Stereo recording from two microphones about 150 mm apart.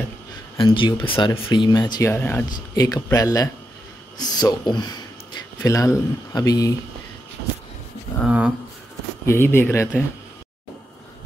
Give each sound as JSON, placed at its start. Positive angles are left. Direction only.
{"t": 0.6, "sound": "speech", "side_deg": 35}
{"t": 2.1, "sound": "speech", "side_deg": 15}
{"t": 2.7, "sound": "speech", "side_deg": 25}
{"t": 8.3, "sound": "speech", "side_deg": -10}
{"t": 9.2, "sound": "speech", "side_deg": 15}